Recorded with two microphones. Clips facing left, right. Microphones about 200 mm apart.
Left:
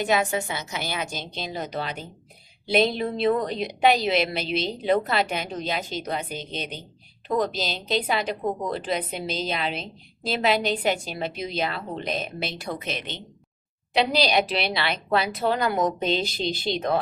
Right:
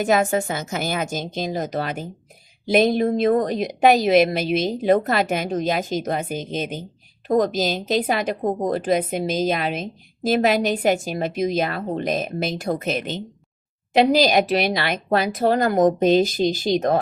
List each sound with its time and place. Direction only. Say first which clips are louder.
0.0 s a woman's voice: right 5 dB; 45° right (ahead or behind)